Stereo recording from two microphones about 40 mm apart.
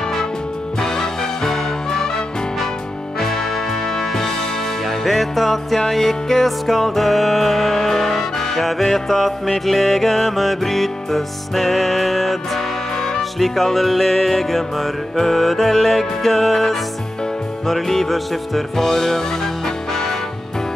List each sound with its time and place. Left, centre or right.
0.7 s music: centre
3.2 s music: centre
12.9 s music: centre
13.4 s music: centre